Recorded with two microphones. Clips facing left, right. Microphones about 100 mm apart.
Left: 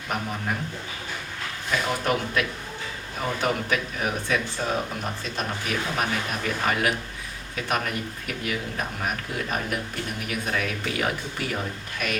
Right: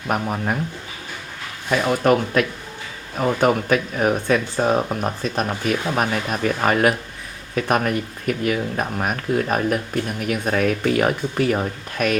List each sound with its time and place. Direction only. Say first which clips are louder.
0.1 s speech: right 7 dB; 55° right (ahead or behind)
1.7 s speech: right 8 dB; 50° right (ahead or behind)
3.4 s speech: right 8 dB; 50° right (ahead or behind)